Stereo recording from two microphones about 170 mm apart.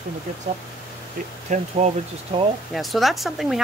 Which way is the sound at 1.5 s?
45° right (ahead or behind).